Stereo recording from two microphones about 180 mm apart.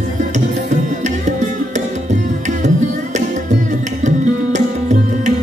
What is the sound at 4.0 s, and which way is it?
Tabla, 40° right (ahead or behind).